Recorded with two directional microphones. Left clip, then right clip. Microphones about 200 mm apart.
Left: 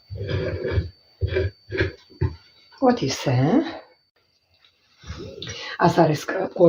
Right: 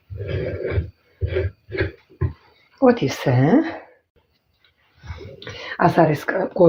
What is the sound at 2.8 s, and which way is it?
Speech, 40° right (ahead or behind).